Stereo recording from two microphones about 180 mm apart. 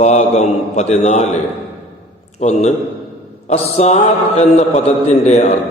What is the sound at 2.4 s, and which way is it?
A man's voice, 40° left (ahead or behind).